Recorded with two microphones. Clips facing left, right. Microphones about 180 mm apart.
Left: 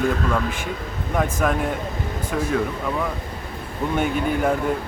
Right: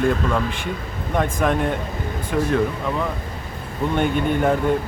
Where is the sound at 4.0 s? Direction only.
5° left (ahead or behind).